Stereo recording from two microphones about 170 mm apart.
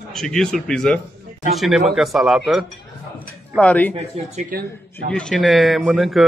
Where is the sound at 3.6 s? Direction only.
10° left (ahead or behind).